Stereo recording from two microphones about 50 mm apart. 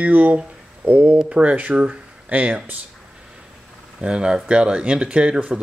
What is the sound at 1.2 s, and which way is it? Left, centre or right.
Speech, right.